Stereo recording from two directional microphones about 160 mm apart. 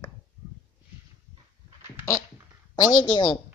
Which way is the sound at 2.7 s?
25° left (ahead or behind).